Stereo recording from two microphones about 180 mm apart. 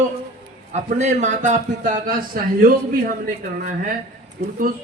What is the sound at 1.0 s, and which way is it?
Speech, 40° right (ahead or behind).